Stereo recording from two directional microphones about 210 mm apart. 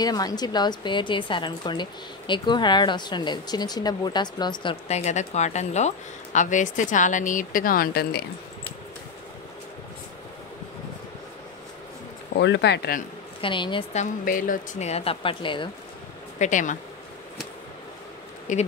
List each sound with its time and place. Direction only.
0.0 s a woman's voice: 20° left (ahead or behind); by 8.2 s 45° left (ahead or behind)
12.4 s speech: 55° left (ahead or behind)
13.4 s a woman's voice: 25° left (ahead or behind)
14.2 s speech: 40° left (ahead or behind); by 15.7 s 25° left (ahead or behind)
16.3 s speech: 35° left (ahead or behind)
18.5 s speech: 35° left (ahead or behind)